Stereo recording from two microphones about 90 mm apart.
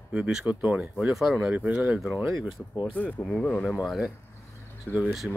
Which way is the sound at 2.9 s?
15° left (ahead or behind).